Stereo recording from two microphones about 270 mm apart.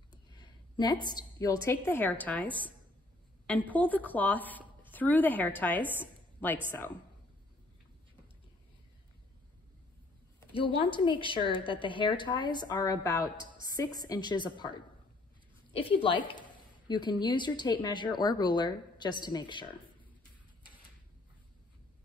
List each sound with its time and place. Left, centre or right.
0.1 s a woman's voice: centre
3.7 s a woman's voice: centre
10.5 s a woman's voice: centre